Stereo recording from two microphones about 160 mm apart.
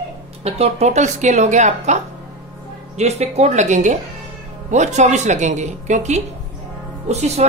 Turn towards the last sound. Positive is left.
turn(degrees=-40)  # may be behind; listen again after turning